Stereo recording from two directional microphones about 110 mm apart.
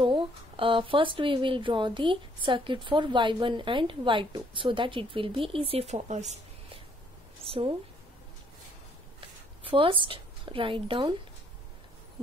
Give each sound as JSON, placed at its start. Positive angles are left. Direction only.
{"t": 0.0, "sound": "speech", "side_deg": -50}
{"t": 7.4, "sound": "a woman's voice", "side_deg": -60}
{"t": 9.6, "sound": "speech", "side_deg": -50}